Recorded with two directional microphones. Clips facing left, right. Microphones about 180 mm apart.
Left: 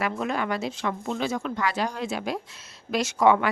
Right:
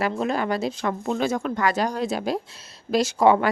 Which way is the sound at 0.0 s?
35° right (ahead or behind).